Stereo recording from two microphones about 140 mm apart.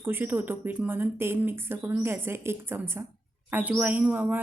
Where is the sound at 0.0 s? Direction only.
15° right (ahead or behind).